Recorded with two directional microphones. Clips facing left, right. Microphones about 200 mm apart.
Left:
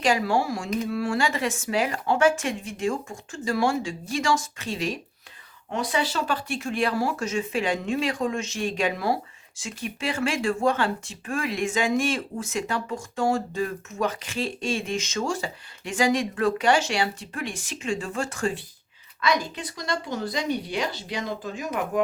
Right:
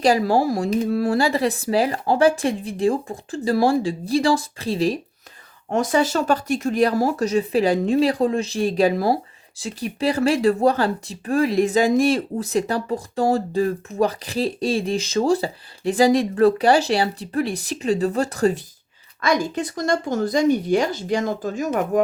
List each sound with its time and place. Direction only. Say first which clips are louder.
0.0 s speech: right 6 dB; 35° right (ahead or behind)
5.7 s speech: right 7 dB; 45° right (ahead or behind)